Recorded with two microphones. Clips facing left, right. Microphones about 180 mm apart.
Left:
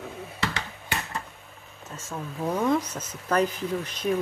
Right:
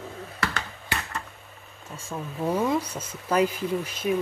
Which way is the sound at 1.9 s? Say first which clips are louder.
Right 1 dB; 10° right (ahead or behind).